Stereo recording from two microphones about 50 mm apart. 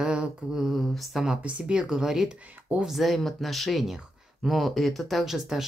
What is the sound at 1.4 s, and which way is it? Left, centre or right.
Speech, right.